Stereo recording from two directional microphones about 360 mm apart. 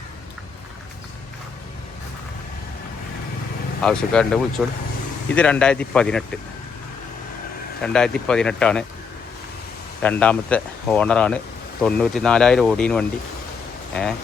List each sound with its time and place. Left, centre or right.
3.8 s speech: centre
7.8 s speech: centre
10.0 s speech: centre